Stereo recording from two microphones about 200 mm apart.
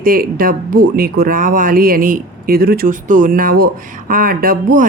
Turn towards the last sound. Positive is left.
turn(degrees=-45)  # may be behind; listen again after turning